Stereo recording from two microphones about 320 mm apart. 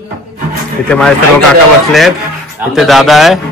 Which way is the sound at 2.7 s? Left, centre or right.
Centre.